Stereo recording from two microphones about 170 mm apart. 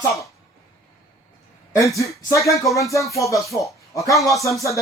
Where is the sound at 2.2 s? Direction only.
20° left (ahead or behind).